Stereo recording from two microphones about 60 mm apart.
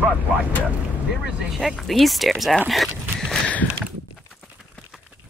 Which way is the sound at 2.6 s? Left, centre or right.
Centre.